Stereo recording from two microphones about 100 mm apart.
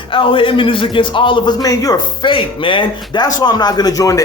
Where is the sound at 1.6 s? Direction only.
35° left (ahead or behind).